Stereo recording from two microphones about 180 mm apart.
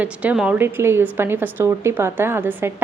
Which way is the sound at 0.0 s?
10° right (ahead or behind).